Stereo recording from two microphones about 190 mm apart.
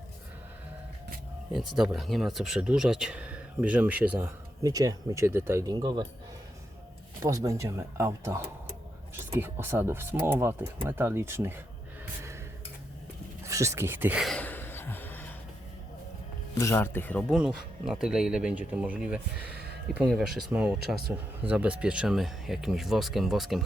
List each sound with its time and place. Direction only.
1.5 s speech: centre (ahead or behind); by 6.1 s 20° right (ahead or behind)
7.2 s speech: 15° right (ahead or behind)
13.4 s a sound: 15° right (ahead or behind); by 15.4 s 10° left (ahead or behind)
16.6 s speech: 15° left (ahead or behind)
17.2 s speech: 5° right (ahead or behind)